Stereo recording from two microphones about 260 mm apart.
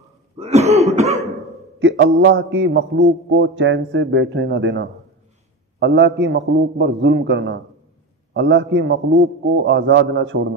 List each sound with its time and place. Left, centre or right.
0.4 s throat clearing: right
1.8 s a man's voice: right